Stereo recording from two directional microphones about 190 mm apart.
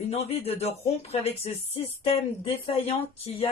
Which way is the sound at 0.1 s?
30° left (ahead or behind).